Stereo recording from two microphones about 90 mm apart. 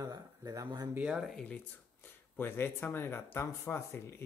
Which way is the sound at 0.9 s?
10° right (ahead or behind).